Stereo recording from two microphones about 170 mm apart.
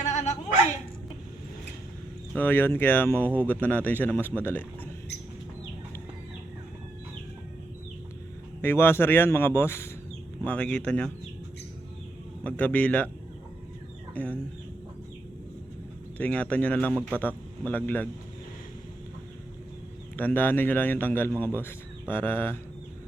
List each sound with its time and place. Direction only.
0.1 s a sound: 45° left (ahead or behind)
2.3 s speech: 10° left (ahead or behind)
8.6 s speech: 15° left (ahead or behind)
12.4 s speech: 10° left (ahead or behind)
14.1 s speech: 10° left (ahead or behind)
16.1 s a man's voice: 10° left (ahead or behind)
20.1 s speech: 10° left (ahead or behind)